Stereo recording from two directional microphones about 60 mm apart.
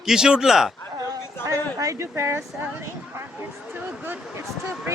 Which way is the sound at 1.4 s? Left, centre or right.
Right.